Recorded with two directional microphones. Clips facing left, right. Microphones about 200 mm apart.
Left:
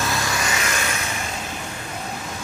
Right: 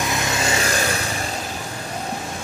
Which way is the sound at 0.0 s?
20° right (ahead or behind).